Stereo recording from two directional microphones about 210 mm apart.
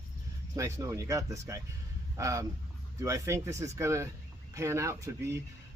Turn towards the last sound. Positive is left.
turn(degrees=-15)  # may be behind; listen again after turning